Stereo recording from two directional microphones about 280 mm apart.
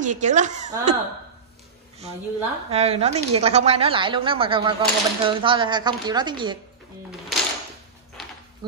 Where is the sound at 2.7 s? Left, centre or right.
Right.